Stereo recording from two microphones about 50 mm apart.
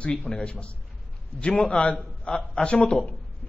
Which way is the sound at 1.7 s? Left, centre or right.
Left.